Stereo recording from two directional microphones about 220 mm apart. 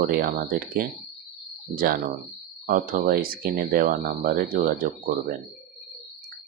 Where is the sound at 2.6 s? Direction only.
40° right (ahead or behind).